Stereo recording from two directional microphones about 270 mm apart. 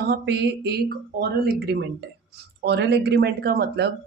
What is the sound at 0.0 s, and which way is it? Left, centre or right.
Speech, right.